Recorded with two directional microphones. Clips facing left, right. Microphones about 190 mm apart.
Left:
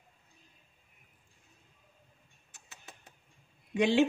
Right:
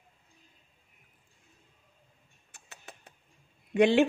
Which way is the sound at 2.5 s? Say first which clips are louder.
Right 4 dB; 55° right (ahead or behind).